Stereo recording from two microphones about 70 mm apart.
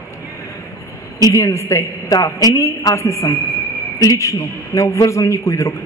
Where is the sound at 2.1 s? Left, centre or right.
Left.